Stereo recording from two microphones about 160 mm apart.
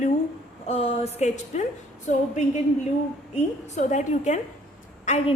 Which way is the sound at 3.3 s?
45° left (ahead or behind).